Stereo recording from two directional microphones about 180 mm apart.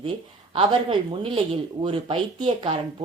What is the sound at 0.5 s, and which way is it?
A woman's voice, 30° right (ahead or behind).